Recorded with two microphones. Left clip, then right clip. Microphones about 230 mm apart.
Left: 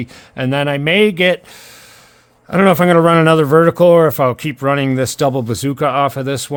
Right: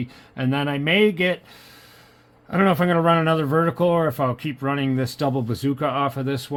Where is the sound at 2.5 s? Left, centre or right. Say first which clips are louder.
Left 9 dB; left.